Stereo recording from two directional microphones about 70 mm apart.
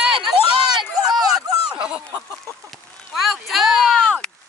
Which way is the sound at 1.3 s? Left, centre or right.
Centre.